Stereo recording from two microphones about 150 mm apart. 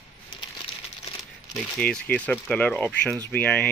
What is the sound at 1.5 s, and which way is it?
Speech, 5° left (ahead or behind).